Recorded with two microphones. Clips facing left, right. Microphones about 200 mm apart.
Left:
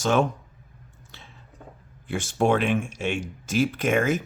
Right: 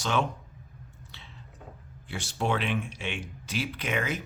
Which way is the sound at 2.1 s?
50° left (ahead or behind).